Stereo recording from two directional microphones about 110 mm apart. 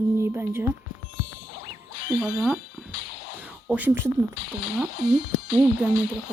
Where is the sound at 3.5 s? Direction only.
10° right (ahead or behind).